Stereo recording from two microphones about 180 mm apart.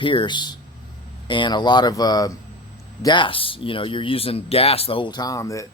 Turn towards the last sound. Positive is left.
turn(degrees=15)  # may be behind; listen again after turning